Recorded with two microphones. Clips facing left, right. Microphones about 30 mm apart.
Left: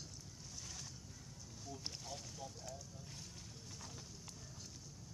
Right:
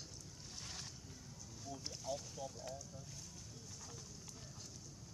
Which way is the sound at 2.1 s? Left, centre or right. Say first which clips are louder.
Right 10 dB; centre.